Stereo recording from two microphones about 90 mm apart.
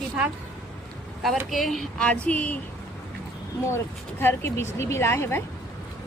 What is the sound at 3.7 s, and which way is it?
Speech, 30° left (ahead or behind).